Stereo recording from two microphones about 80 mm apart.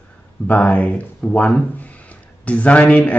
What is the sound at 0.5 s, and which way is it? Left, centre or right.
A man's voice, centre.